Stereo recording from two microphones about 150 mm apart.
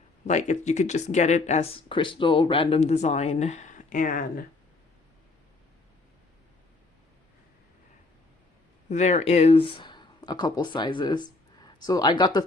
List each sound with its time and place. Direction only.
0.3 s speech: 50° left (ahead or behind)
1.9 s speech: 35° left (ahead or behind); by 4.4 s 70° left (ahead or behind)
8.9 s speech: 50° left (ahead or behind); by 12.5 s 30° left (ahead or behind)